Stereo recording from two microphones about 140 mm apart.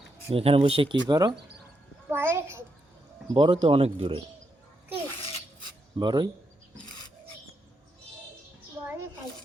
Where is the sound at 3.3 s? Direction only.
40° right (ahead or behind).